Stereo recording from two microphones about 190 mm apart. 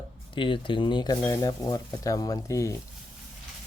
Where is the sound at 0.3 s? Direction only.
25° left (ahead or behind).